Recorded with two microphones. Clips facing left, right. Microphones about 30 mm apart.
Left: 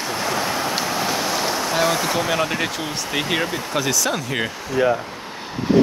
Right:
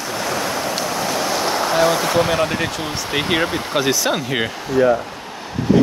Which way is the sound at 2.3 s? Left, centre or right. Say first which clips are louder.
Right 2 dB; centre.